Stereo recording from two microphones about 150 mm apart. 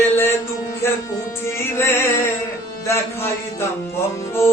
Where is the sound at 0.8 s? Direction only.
15° left (ahead or behind).